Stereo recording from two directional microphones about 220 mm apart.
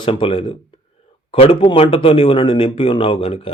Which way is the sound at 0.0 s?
25° left (ahead or behind).